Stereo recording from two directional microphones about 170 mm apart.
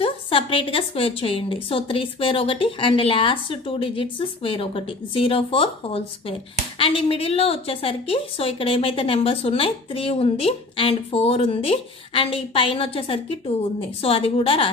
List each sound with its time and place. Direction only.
0.0 s a woman's voice: 35° left (ahead or behind)